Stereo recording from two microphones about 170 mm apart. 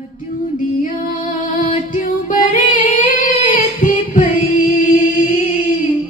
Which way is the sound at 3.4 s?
50° left (ahead or behind).